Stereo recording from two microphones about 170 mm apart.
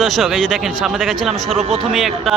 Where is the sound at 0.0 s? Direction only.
Centre (ahead or behind).